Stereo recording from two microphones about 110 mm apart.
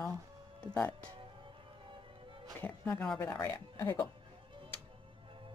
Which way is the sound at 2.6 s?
20° left (ahead or behind).